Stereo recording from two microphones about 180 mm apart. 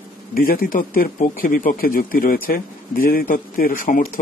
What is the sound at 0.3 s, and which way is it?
Speech, 55° left (ahead or behind).